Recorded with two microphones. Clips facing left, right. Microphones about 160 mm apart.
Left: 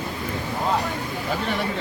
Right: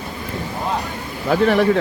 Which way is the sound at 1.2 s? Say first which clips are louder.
Right 12 dB; 90° right.